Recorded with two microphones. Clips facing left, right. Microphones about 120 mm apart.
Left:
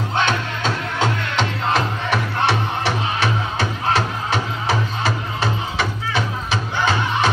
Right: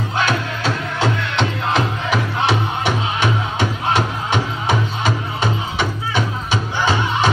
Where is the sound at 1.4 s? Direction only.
Centre (ahead or behind).